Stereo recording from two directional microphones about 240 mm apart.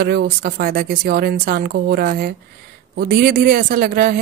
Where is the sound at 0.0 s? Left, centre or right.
Right.